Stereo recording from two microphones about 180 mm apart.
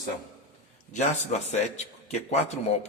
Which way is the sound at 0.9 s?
40° left (ahead or behind).